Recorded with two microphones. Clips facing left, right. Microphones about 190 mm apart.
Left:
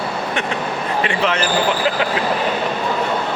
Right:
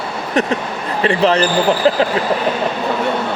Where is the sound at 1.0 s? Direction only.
35° right (ahead or behind).